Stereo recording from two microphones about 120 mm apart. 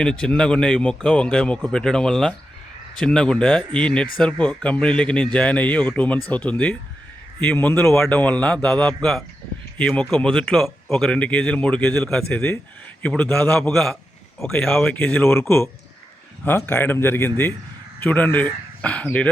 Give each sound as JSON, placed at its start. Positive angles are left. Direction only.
{"t": 0.0, "sound": "speech", "side_deg": 5}
{"t": 12.0, "sound": "speech", "side_deg": 5}
{"t": 14.9, "sound": "speech", "side_deg": 15}